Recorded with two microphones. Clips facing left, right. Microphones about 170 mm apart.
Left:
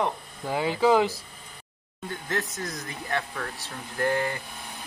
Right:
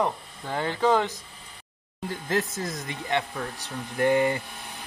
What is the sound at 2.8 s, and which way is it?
Speech, 20° right (ahead or behind).